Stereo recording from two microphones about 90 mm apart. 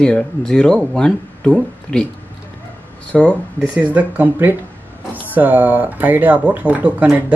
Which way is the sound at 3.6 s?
15° right (ahead or behind).